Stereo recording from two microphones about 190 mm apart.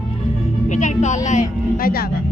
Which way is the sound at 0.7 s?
40° left (ahead or behind).